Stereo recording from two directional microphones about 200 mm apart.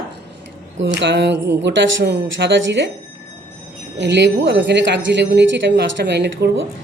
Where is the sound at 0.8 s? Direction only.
60° right (ahead or behind).